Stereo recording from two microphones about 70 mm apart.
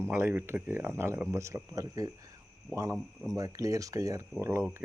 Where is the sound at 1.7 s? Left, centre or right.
Right.